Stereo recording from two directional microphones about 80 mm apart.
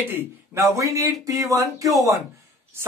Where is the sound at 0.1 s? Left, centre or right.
Right.